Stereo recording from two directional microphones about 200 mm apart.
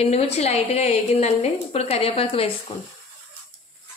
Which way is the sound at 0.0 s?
30° left (ahead or behind).